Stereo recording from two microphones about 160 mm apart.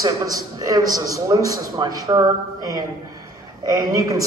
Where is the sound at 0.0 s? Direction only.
20° right (ahead or behind).